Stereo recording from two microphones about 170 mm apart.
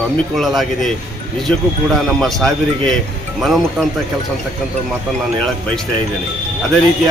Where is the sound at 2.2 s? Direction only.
Centre (ahead or behind).